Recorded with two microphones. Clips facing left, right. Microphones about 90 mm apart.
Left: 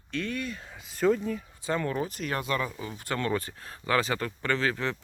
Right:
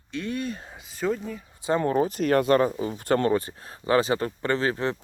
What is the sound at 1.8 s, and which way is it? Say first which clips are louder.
Speech: right 7 dB; 35° right (ahead or behind).